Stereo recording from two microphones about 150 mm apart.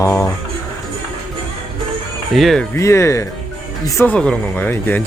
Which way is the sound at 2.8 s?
20° left (ahead or behind).